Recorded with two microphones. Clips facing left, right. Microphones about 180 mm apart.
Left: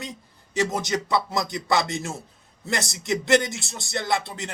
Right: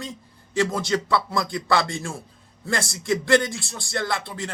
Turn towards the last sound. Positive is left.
turn(degrees=20)  # may be behind; listen again after turning